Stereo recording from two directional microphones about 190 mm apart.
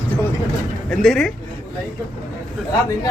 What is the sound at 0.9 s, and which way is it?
Speech, 5° left (ahead or behind).